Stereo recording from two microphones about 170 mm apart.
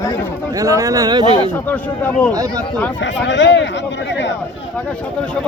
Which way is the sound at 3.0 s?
90° left.